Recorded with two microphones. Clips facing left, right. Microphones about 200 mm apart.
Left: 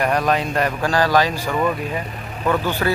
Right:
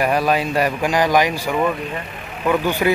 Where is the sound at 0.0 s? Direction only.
5° right (ahead or behind).